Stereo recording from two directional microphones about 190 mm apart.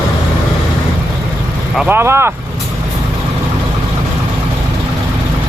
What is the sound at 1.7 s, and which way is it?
Speech, 5° right (ahead or behind).